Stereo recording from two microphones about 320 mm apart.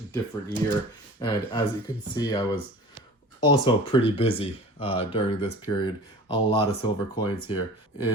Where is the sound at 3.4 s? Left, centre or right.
Centre.